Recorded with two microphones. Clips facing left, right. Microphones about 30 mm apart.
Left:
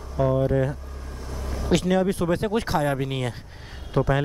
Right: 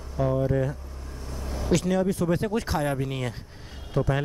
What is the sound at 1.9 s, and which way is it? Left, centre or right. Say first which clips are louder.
Speech: left 3 dB; left.